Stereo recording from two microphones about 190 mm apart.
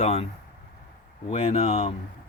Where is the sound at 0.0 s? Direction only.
35° left (ahead or behind).